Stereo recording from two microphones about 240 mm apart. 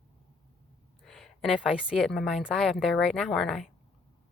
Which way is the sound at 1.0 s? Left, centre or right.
Centre.